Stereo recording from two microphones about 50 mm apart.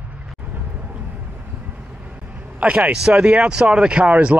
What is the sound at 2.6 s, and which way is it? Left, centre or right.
Speech, right.